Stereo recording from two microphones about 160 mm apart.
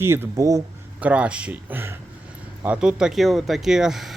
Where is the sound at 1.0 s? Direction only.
10° right (ahead or behind).